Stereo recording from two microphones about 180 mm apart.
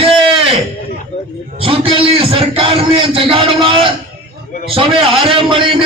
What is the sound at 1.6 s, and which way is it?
A man's voice, 30° right (ahead or behind).